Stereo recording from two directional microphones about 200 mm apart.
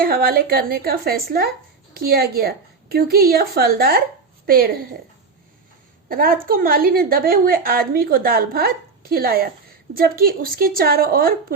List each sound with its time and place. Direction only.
0.0 s speech: 50° right (ahead or behind)
6.1 s speech: 45° right (ahead or behind)